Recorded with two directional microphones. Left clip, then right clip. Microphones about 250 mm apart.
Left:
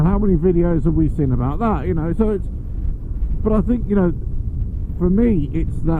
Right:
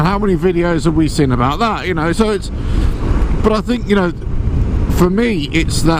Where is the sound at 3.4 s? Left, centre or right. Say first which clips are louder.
Right 5 dB; centre.